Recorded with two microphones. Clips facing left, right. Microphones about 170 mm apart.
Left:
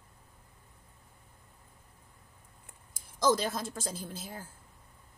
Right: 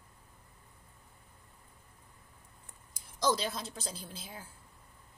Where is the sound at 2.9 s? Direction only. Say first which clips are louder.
Left 4 dB; 50° left (ahead or behind).